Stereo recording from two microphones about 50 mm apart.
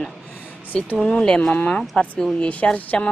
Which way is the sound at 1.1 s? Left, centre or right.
Centre.